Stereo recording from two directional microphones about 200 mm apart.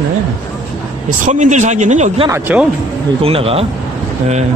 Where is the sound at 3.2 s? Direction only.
30° right (ahead or behind).